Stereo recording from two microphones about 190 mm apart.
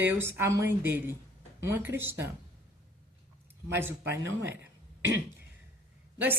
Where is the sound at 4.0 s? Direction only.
65° right (ahead or behind).